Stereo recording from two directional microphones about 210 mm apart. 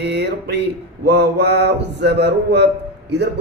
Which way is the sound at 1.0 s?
55° right (ahead or behind).